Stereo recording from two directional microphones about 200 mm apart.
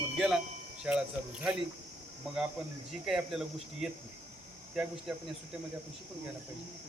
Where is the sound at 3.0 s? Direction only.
Centre (ahead or behind).